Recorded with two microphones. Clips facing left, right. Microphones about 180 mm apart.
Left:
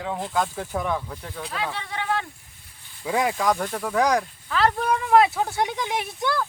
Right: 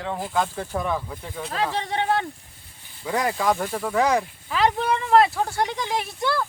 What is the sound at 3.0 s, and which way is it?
Speech, 5° left (ahead or behind).